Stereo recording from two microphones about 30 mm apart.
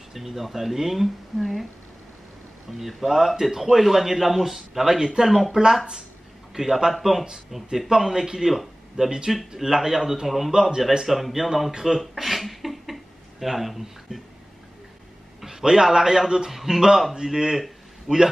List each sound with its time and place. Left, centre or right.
0.1 s a man's voice: centre
3.0 s a man's voice: centre
7.9 s a man's voice: right
8.5 s a man's voice: centre
10.5 s a man's voice: right
11.1 s speech: centre
12.2 s a sound: centre
15.4 s a man's voice: centre